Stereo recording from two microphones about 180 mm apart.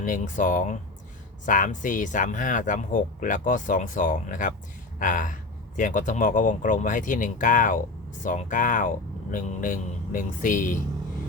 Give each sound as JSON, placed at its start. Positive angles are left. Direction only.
{"t": 0.0, "sound": "speech", "side_deg": 45}